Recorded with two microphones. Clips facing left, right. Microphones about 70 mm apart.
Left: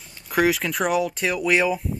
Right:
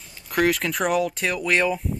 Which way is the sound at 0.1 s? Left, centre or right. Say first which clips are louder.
Left 1 dB; centre.